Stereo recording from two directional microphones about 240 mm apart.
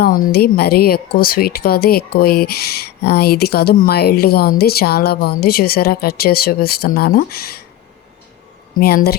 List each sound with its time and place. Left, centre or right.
0.0 s speech: left
8.8 s speech: left